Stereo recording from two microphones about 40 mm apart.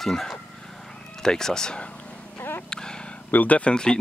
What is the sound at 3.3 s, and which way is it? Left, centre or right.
Speech, left.